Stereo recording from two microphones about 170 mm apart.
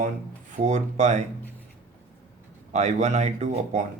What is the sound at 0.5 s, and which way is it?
Speech, 45° right (ahead or behind).